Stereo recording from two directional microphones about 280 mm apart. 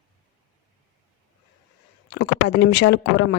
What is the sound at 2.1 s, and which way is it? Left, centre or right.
Speech, left.